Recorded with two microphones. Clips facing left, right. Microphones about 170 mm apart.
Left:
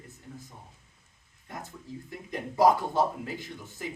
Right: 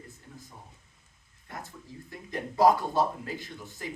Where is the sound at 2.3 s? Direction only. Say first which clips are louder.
Even; 15° left (ahead or behind).